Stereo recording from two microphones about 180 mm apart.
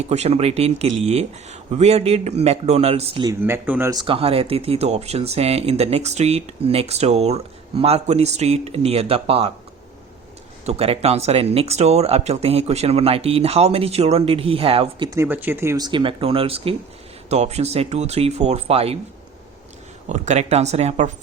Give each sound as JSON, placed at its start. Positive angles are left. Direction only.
{"t": 0.0, "sound": "speech", "side_deg": -35}
{"t": 3.2, "sound": "speech", "side_deg": -15}
{"t": 4.0, "sound": "speech", "side_deg": -30}
{"t": 10.7, "sound": "speech", "side_deg": -35}
{"t": 15.2, "sound": "speech", "side_deg": -10}
{"t": 20.1, "sound": "speech", "side_deg": -40}